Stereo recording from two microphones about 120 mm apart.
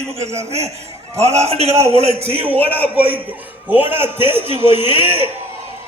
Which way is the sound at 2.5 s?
50° right (ahead or behind).